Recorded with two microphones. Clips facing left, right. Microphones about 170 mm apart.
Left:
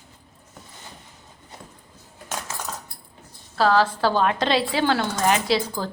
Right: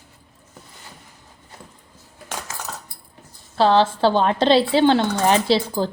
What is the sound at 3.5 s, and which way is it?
A woman's voice, 25° right (ahead or behind).